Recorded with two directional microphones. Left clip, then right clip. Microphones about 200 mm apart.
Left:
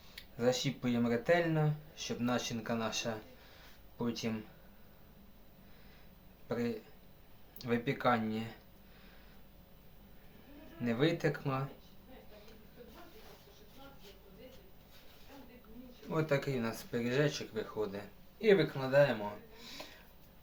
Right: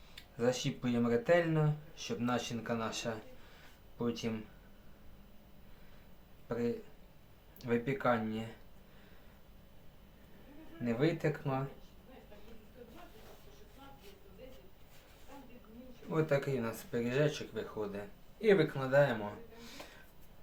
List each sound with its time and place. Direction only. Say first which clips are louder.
0.2 s speech: left 1 dB; 5° left (ahead or behind)
7.6 s speech: even; 15° left (ahead or behind)
10.8 s speech: left 1 dB; 20° left (ahead or behind)
16.0 s speech: right 1 dB; centre (ahead or behind)